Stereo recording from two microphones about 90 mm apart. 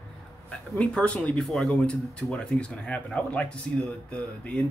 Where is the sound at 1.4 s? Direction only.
Centre (ahead or behind).